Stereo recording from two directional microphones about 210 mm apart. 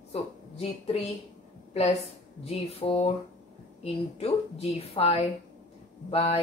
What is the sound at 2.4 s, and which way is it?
A woman's voice, 30° left (ahead or behind).